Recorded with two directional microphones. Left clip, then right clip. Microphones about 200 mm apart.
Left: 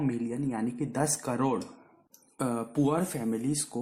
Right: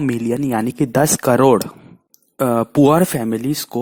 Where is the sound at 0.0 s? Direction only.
45° right (ahead or behind).